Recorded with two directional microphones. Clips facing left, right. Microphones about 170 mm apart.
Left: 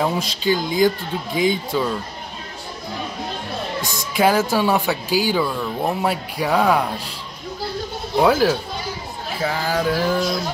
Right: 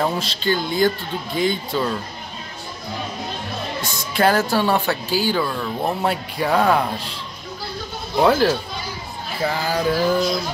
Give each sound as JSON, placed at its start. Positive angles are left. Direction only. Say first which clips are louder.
{"t": 0.0, "sound": "speech", "louder": "left 1 dB", "side_deg": 5}
{"t": 4.2, "sound": "speech", "louder": "left 1 dB", "side_deg": 5}
{"t": 8.2, "sound": "speech", "louder": "even", "side_deg": 5}